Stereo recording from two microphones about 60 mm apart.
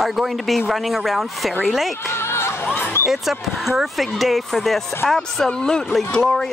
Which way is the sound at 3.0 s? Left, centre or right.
Centre.